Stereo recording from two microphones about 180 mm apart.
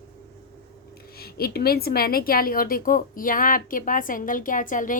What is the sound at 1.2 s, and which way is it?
A woman's voice, 60° left (ahead or behind).